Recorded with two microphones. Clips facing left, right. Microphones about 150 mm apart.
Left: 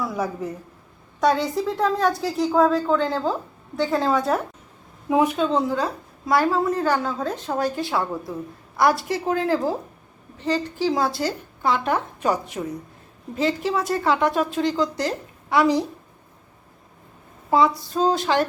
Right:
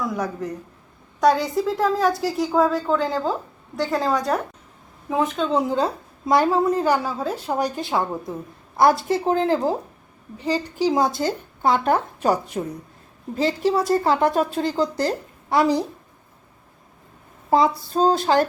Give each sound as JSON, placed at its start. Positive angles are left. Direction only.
{"t": 0.0, "sound": "a woman's voice", "side_deg": 5}
{"t": 5.0, "sound": "a woman's voice", "side_deg": 10}
{"t": 5.7, "sound": "a woman's voice", "side_deg": -25}
{"t": 10.3, "sound": "a woman's voice", "side_deg": -10}
{"t": 11.3, "sound": "speech", "side_deg": -40}
{"t": 17.5, "sound": "speech", "side_deg": -35}